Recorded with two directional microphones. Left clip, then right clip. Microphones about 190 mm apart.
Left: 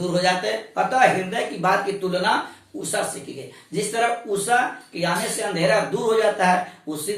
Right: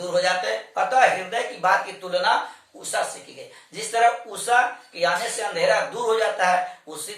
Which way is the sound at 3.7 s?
10° right (ahead or behind).